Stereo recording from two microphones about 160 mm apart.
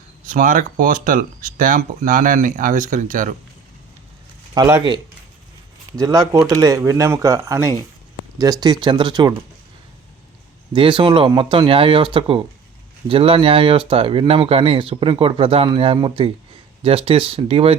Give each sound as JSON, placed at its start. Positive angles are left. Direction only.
{"t": 0.3, "sound": "speech", "side_deg": -55}
{"t": 4.5, "sound": "speech", "side_deg": -25}
{"t": 6.0, "sound": "speech", "side_deg": -20}
{"t": 10.8, "sound": "speech", "side_deg": -30}